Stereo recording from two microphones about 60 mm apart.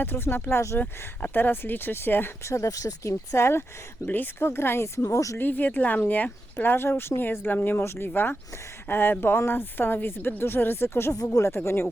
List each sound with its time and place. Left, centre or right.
0.0 s speech: left
2.4 s speech: left
4.0 s speech: left
5.1 s speech: left
5.4 s speech: left